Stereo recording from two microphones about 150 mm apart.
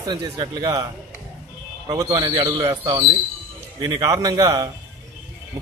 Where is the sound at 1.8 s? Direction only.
20° right (ahead or behind).